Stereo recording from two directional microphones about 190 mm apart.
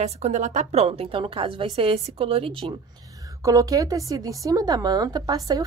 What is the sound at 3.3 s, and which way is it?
A woman's voice, 15° right (ahead or behind).